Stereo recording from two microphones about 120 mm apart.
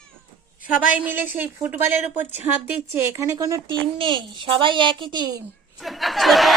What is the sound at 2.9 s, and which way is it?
Speech, 25° right (ahead or behind).